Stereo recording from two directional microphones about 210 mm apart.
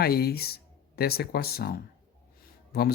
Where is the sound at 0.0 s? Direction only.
45° left (ahead or behind).